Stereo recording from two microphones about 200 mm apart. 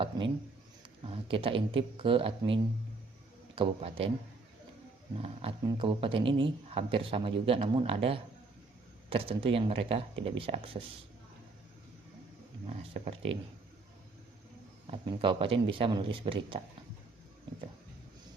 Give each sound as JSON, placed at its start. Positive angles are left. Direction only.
{"t": 0.8, "sound": "speech", "side_deg": -25}
{"t": 5.2, "sound": "speech", "side_deg": -30}
{"t": 12.6, "sound": "speech", "side_deg": -30}
{"t": 14.8, "sound": "speech", "side_deg": -25}